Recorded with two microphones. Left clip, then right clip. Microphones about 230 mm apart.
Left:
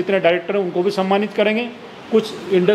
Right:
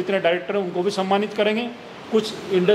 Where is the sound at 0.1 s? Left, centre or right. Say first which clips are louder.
Left 4 dB; left.